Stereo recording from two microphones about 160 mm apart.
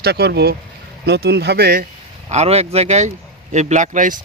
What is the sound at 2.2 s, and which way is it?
Speech, 45° right (ahead or behind).